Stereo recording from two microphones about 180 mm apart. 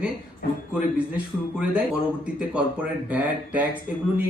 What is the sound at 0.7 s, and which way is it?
A man's voice, 5° right (ahead or behind).